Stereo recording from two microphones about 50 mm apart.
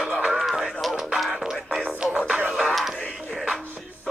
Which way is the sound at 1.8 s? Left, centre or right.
Right.